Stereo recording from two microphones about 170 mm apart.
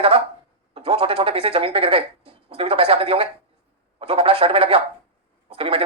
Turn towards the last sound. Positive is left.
turn(degrees=-35)  # may be behind; listen again after turning